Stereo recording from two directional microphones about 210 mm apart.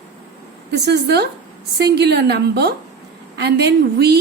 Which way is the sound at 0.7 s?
55° right (ahead or behind).